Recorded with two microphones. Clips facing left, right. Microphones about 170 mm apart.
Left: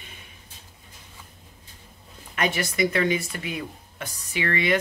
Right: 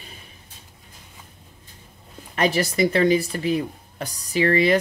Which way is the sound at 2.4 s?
35° right (ahead or behind).